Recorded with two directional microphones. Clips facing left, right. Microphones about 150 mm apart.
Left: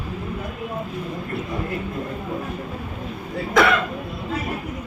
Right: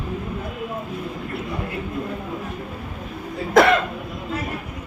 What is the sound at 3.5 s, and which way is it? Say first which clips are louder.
Speech: right 3 dB; 50° right (ahead or behind).